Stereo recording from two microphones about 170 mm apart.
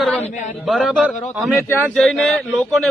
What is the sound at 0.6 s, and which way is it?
A man's voice, centre (ahead or behind).